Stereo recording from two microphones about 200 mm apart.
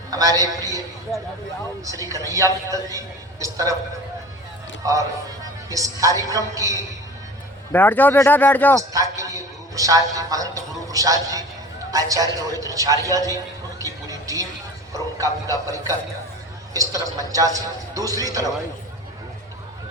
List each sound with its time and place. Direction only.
0.1 s a man's voice: 20° right (ahead or behind)
1.8 s a man's voice: 15° right (ahead or behind)
4.8 s a man's voice: 15° right (ahead or behind)
7.7 s speech: 10° left (ahead or behind)
8.9 s a man's voice: 15° right (ahead or behind)
13.1 s a sound: 15° right (ahead or behind)
14.9 s a man's voice: 15° right (ahead or behind)